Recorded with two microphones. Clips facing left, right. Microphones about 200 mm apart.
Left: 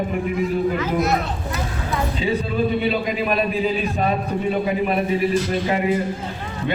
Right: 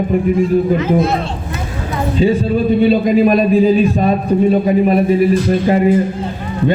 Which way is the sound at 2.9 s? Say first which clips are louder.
Right 11 dB; 40° right (ahead or behind).